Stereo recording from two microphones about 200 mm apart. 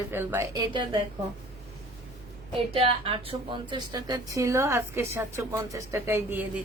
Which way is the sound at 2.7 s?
30° right (ahead or behind).